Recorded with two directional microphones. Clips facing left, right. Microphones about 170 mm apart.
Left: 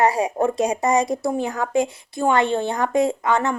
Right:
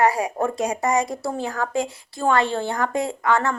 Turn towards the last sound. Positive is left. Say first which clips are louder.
# left 1 dB
turn(degrees=20)  # may be behind; listen again after turning